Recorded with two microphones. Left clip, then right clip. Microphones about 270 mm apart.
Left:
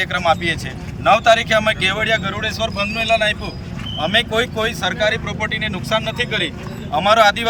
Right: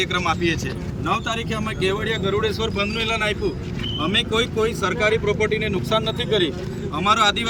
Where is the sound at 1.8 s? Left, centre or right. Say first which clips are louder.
Left 5 dB; centre.